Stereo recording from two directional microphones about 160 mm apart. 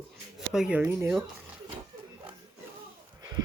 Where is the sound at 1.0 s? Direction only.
20° right (ahead or behind).